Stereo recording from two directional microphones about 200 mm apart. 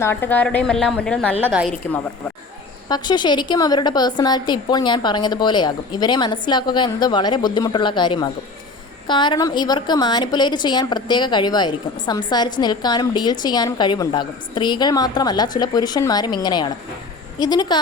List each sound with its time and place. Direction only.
0.0 s a woman's voice: 10° left (ahead or behind)
1.4 s a woman's voice: 5° right (ahead or behind)
2.9 s a woman's voice: 20° left (ahead or behind)